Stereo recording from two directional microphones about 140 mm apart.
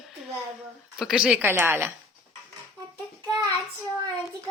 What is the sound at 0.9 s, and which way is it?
A woman's voice, 5° right (ahead or behind).